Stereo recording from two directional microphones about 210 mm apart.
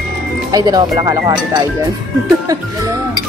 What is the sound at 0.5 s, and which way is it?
Speech, 15° right (ahead or behind).